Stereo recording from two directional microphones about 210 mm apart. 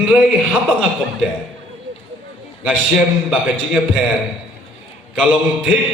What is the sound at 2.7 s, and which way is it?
A man's voice, 5° right (ahead or behind).